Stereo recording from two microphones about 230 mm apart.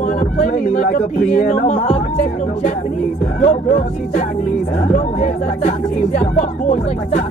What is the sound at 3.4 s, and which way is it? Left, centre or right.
Speech, left.